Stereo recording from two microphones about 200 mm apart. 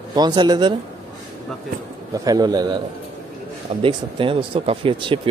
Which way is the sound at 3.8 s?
25° right (ahead or behind).